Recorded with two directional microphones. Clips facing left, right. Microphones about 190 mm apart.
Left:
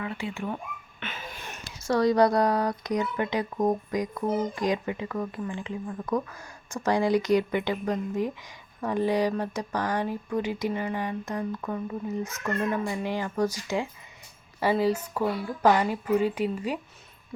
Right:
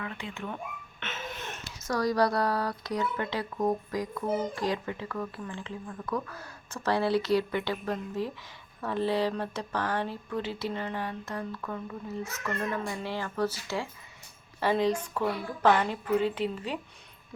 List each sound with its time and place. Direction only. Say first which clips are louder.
0.0 s speech: left 5 dB; 10° left (ahead or behind)
0.9 s a sound: right 2 dB; 5° left (ahead or behind)
1.9 s speech: left 5 dB; 25° left (ahead or behind)